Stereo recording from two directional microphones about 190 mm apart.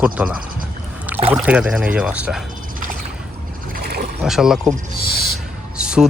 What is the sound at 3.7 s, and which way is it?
Boat, 55° right (ahead or behind).